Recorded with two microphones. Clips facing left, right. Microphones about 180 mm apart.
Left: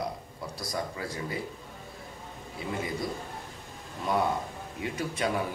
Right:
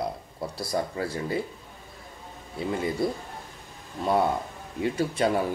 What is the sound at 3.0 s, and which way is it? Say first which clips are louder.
Speech: right 6 dB; 30° right (ahead or behind).